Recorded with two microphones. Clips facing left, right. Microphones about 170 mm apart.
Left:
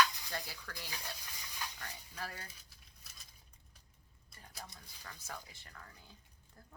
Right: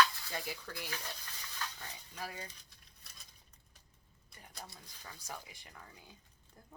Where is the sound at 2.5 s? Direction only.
Centre (ahead or behind).